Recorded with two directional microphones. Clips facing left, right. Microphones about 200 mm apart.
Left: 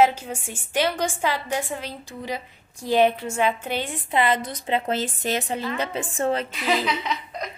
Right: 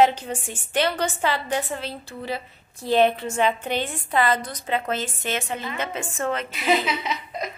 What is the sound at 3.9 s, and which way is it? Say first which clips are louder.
A woman's voice: left 2 dB; 20° left (ahead or behind).